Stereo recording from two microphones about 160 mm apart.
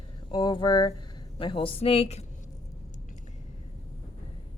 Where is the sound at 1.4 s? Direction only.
35° left (ahead or behind).